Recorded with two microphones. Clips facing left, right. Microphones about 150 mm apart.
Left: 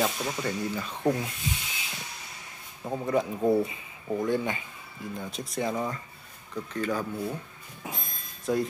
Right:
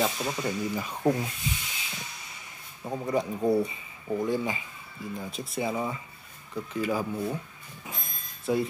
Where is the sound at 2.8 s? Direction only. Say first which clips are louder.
Left 1 dB; 5° left (ahead or behind).